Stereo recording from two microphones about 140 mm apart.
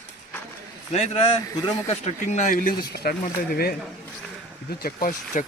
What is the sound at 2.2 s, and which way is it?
Speech, 60° left (ahead or behind).